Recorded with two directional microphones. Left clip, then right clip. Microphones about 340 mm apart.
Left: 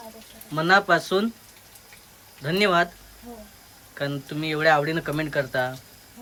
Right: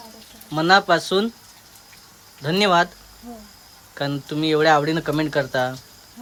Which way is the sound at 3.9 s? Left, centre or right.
Centre.